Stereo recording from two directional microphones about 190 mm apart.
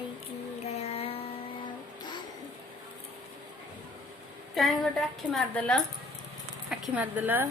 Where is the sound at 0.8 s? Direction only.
30° left (ahead or behind).